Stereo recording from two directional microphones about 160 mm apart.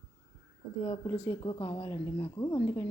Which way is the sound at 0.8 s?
25° left (ahead or behind).